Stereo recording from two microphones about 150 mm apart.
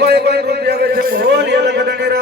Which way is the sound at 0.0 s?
90° right.